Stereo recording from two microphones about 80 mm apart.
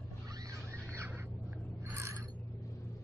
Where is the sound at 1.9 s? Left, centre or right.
Right.